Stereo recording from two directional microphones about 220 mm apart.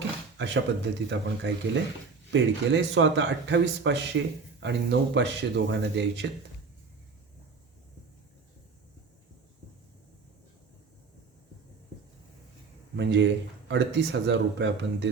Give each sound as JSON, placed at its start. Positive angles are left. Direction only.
{"t": 0.3, "sound": "speech", "side_deg": -55}
{"t": 13.0, "sound": "speech", "side_deg": -55}